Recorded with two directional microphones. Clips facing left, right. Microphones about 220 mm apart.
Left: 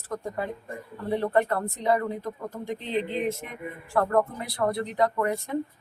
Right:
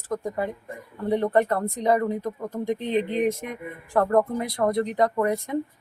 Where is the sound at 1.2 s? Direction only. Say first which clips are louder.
Right 2 dB; 20° right (ahead or behind).